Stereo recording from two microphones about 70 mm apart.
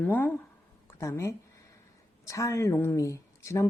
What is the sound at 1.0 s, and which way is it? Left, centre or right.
Speech, left.